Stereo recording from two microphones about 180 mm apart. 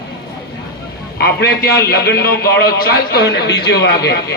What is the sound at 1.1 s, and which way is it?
A man's voice, 60° left (ahead or behind).